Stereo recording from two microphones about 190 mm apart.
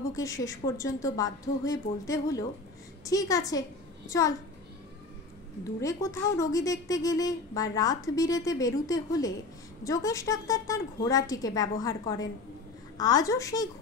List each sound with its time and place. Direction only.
0.1 s speech: 15° left (ahead or behind)
5.6 s a woman's voice: 15° left (ahead or behind)